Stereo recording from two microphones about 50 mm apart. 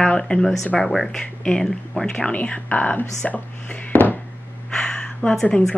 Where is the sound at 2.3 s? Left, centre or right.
Left.